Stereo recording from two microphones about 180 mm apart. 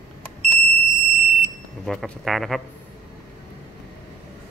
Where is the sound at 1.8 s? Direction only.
Centre (ahead or behind).